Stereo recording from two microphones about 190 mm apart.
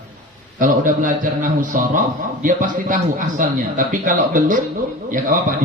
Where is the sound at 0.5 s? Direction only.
45° right (ahead or behind).